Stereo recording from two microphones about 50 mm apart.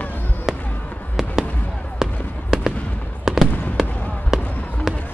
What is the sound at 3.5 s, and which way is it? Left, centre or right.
Fireworks, left.